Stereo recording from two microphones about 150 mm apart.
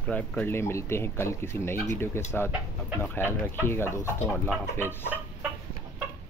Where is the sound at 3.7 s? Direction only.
15° left (ahead or behind).